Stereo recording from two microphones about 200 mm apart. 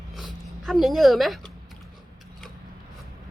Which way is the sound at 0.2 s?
Centre (ahead or behind).